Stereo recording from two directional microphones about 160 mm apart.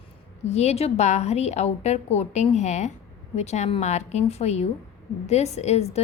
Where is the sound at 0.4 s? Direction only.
45° left (ahead or behind).